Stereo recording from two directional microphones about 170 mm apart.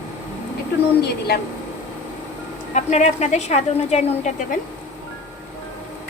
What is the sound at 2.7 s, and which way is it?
Speech, 40° left (ahead or behind).